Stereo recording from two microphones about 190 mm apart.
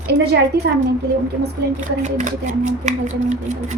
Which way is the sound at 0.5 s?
60° right (ahead or behind).